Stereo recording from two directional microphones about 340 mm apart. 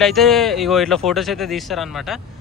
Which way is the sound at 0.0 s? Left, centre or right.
Centre.